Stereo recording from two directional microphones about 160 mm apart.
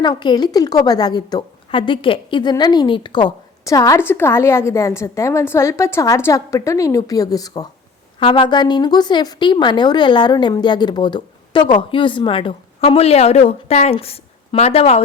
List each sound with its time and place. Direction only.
0.0 s a woman's voice: 25° left (ahead or behind)